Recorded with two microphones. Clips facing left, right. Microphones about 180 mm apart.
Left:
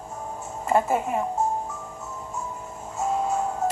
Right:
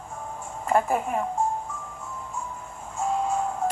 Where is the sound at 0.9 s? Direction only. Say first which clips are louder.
Left 1 dB; centre (ahead or behind).